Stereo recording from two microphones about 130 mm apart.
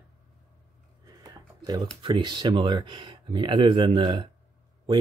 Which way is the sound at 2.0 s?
35° right (ahead or behind).